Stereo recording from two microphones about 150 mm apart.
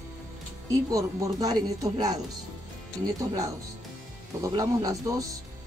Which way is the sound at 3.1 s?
25° right (ahead or behind).